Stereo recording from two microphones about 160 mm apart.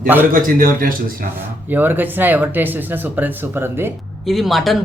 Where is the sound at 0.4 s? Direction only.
60° right (ahead or behind).